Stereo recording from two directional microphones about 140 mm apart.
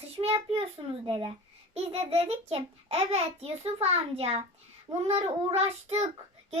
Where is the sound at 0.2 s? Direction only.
45° right (ahead or behind).